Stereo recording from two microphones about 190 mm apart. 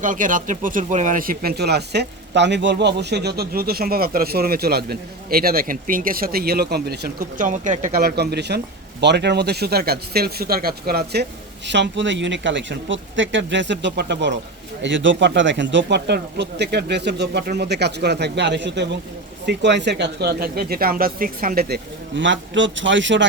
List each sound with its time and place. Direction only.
0.0 s speech: 45° right (ahead or behind); by 23.2 s 75° right (ahead or behind)